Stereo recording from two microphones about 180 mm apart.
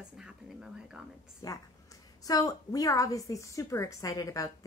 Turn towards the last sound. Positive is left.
turn(degrees=20)  # may be behind; listen again after turning